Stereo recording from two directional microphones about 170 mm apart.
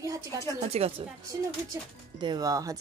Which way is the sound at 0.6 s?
35° right (ahead or behind).